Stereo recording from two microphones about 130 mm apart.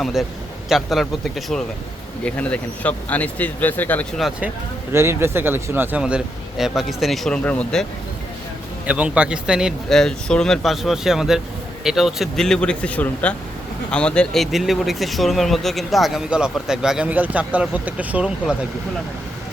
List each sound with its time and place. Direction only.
0.0 s speech: centre (ahead or behind)
4.2 s speech: 10° right (ahead or behind); by 7.9 s 5° left (ahead or behind)
8.9 s speech: 10° right (ahead or behind)